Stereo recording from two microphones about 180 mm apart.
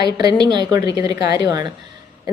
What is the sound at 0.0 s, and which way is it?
A woman's voice, 20° right (ahead or behind).